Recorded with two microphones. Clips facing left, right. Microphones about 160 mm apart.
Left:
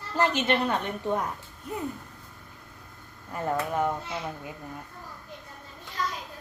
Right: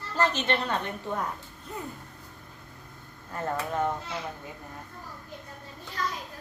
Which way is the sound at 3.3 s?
10° left (ahead or behind).